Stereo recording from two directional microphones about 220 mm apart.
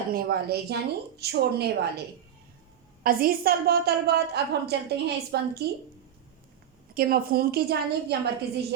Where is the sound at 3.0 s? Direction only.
40° right (ahead or behind).